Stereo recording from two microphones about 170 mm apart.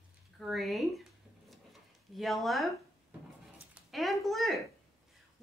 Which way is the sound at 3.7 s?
Centre (ahead or behind).